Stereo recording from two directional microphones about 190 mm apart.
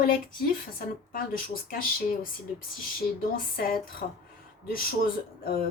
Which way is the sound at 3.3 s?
50° left (ahead or behind).